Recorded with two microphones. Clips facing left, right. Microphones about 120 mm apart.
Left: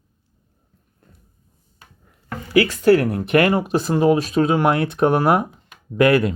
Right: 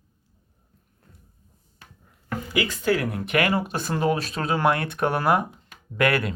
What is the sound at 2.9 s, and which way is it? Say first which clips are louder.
Speech: left 8 dB; 35° left (ahead or behind).